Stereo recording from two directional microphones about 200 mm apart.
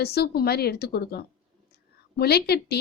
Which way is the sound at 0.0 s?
50° left (ahead or behind).